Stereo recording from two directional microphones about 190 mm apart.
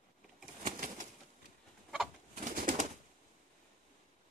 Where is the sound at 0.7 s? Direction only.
45° right (ahead or behind).